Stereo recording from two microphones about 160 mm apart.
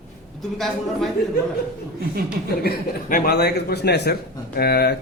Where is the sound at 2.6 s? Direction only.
65° left (ahead or behind); by 4.1 s 90° left.